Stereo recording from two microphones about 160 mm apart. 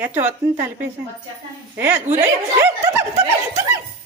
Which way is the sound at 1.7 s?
15° right (ahead or behind).